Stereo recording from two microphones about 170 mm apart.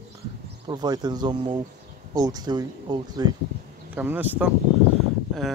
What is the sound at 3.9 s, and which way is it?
Speech, 10° right (ahead or behind).